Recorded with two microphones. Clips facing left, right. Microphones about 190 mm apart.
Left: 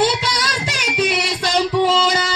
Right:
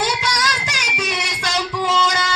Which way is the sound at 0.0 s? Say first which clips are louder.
Left 3 dB; 30° left (ahead or behind).